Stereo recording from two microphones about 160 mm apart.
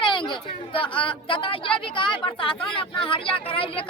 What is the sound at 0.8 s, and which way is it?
A woman's voice, 30° left (ahead or behind).